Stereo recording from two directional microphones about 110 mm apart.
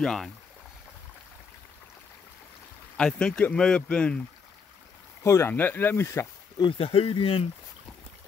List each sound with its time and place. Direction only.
0.0 s speech: 5° left (ahead or behind)
3.0 s speech: 5° left (ahead or behind)
5.2 s speech: 25° left (ahead or behind)
6.6 s speech: 60° left (ahead or behind)